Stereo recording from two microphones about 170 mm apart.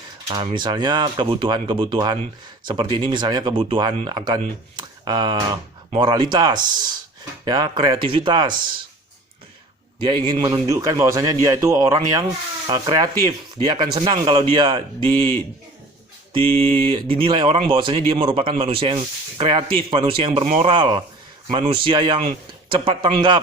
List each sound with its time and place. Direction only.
0.3 s speech: 25° right (ahead or behind)
4.8 s a sound: 25° right (ahead or behind)
5.9 s speech: 30° right (ahead or behind)
10.0 s speech: 30° right (ahead or behind)
10.7 s speech: 20° right (ahead or behind)
16.3 s speech: 30° right (ahead or behind)